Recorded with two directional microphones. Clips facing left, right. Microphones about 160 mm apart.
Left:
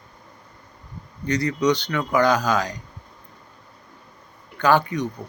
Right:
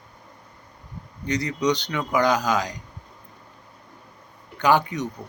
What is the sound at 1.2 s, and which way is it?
Speech, 15° right (ahead or behind).